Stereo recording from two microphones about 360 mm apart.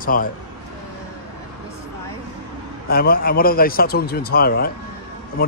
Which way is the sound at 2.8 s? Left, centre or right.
Left.